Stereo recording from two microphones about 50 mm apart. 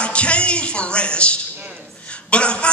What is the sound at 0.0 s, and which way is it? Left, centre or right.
A man's voice, left.